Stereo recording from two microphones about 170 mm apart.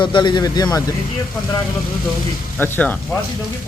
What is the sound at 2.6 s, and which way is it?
Speech, 10° left (ahead or behind).